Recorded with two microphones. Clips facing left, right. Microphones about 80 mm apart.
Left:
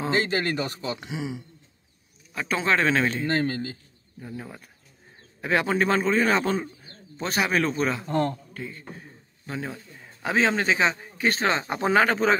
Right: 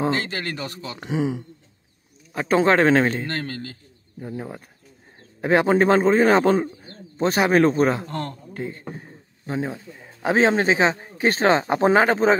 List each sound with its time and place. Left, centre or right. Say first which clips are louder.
0.1 s speech: left 2 dB; centre
0.9 s a man's voice: right 8 dB; right
3.3 s speech: left 4 dB; centre
4.2 s a man's voice: right 6 dB; right
8.1 s speech: left 5 dB; centre
8.5 s a man's voice: right 6 dB; right